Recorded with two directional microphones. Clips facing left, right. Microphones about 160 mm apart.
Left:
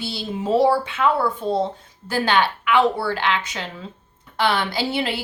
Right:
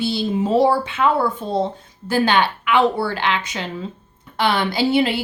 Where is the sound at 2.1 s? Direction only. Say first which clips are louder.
Right 3 dB; 20° right (ahead or behind).